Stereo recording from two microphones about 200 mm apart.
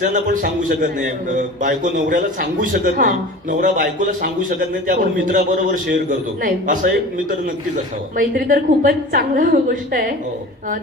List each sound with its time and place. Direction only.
0.0 s a man's voice: 40° right (ahead or behind)